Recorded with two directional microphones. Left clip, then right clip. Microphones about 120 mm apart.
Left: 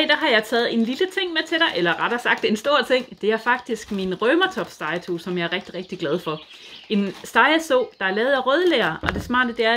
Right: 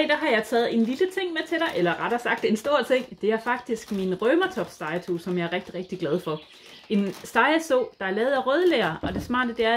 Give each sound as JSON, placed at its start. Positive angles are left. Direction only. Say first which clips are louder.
{"t": 0.0, "sound": "speech", "louder": "left 4 dB", "side_deg": 20}